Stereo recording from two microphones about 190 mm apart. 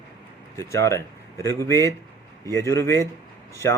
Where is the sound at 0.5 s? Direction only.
15° left (ahead or behind).